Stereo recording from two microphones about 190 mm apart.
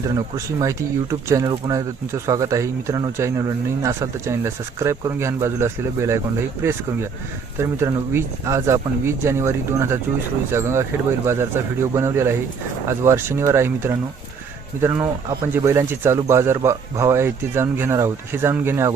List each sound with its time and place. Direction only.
0.3 s speech: 15° right (ahead or behind)